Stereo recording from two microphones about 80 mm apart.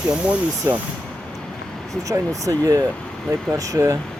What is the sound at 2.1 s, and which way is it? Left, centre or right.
Speech, right.